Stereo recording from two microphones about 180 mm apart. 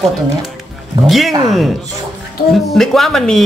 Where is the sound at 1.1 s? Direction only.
Centre (ahead or behind).